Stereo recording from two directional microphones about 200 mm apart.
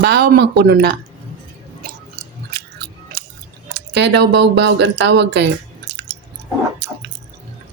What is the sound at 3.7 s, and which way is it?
Speech, 60° right (ahead or behind).